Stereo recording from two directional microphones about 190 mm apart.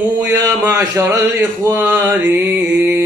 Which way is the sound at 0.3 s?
10° right (ahead or behind).